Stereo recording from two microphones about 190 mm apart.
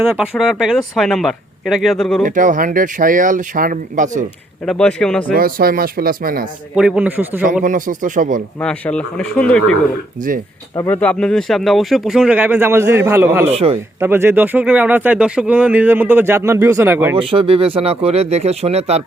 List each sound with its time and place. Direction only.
0.0 s speech: 5° right (ahead or behind)
2.2 s speech: 45° right (ahead or behind)
4.6 s speech: 5° left (ahead or behind)
5.3 s speech: 50° right (ahead or behind)
6.7 s speech: 5° right (ahead or behind)
7.6 s speech: 45° right (ahead or behind)
8.6 s speech: 5° left (ahead or behind)
10.2 s speech: 45° right (ahead or behind)
10.8 s speech: 10° left (ahead or behind); by 13.5 s 15° right (ahead or behind)
13.5 s speech: 30° right (ahead or behind)
14.0 s speech: 10° right (ahead or behind)
17.2 s speech: 30° right (ahead or behind)